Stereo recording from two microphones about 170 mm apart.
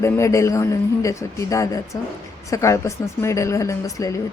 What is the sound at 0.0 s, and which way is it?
A woman's voice, 15° left (ahead or behind).